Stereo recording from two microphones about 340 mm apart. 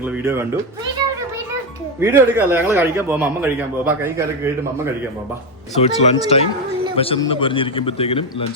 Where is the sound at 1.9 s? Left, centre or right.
Centre.